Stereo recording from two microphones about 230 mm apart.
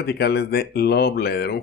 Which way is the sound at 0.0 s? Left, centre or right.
Left.